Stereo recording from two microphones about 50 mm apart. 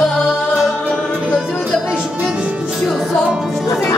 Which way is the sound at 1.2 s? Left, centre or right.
Right.